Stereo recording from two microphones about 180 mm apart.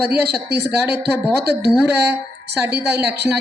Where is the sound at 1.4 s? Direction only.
65° right (ahead or behind).